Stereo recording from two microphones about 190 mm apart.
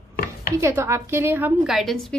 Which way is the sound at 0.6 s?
15° right (ahead or behind).